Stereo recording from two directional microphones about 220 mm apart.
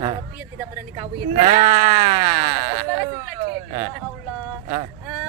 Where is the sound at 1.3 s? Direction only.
30° right (ahead or behind).